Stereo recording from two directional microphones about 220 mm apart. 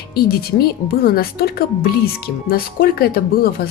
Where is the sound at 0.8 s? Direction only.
45° left (ahead or behind).